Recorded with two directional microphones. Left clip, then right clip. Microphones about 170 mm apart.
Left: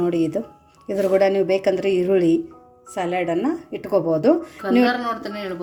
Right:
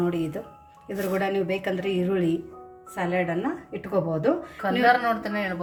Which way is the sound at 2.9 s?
55° left (ahead or behind).